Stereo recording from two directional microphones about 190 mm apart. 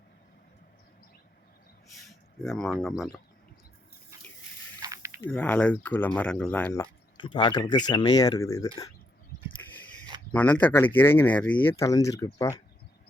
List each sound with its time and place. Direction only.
2.4 s speech: 5° left (ahead or behind)
4.8 s snake: 15° right (ahead or behind)
5.3 s speech: 5° left (ahead or behind)
7.2 s speech: 25° left (ahead or behind)
9.6 s a sound: 15° left (ahead or behind)
10.3 s speech: 10° left (ahead or behind)